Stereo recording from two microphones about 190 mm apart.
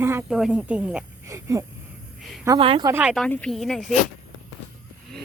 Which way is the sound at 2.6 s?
30° right (ahead or behind).